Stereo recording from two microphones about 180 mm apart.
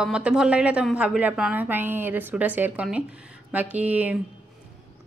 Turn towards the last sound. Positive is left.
turn(degrees=-10)  # may be behind; listen again after turning